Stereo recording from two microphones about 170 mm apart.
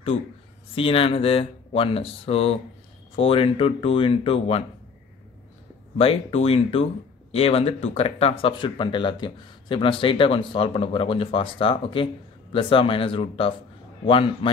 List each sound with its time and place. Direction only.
0.7 s speech: 35° left (ahead or behind)
5.9 s speech: 35° left (ahead or behind)